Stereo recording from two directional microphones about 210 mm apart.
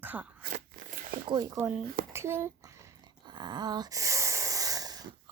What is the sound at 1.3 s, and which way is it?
Speech, 20° right (ahead or behind).